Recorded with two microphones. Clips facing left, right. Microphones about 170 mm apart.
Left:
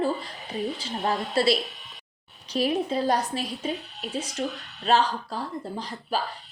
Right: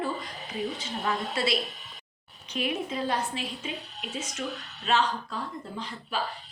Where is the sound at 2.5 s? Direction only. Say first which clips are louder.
Left 6 dB; 35° left (ahead or behind).